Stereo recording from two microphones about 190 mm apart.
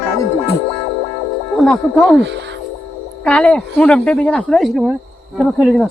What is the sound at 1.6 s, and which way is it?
Speech, centre (ahead or behind).